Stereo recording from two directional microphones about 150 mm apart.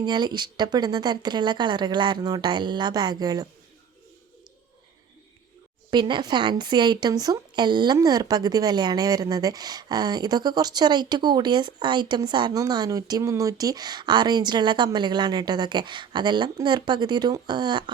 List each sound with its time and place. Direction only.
0.0 s a woman's voice: 30° right (ahead or behind)
5.9 s a woman's voice: 30° right (ahead or behind)